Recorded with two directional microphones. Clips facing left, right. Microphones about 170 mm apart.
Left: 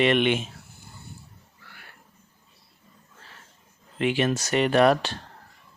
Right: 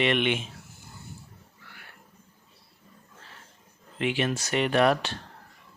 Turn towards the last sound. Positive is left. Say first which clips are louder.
# left 3 dB
turn(degrees=40)  # may be behind; listen again after turning